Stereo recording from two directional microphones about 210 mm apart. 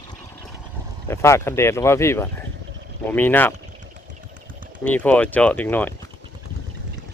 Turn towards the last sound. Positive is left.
turn(degrees=10)  # may be behind; listen again after turning